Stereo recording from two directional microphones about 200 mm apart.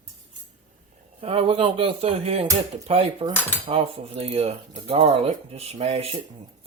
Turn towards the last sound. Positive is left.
turn(degrees=-30)  # may be behind; listen again after turning